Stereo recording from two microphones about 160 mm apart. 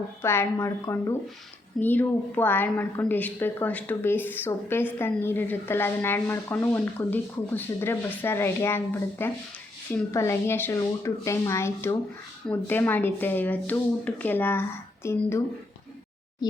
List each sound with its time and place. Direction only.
0.2 s a woman's voice: 15° left (ahead or behind)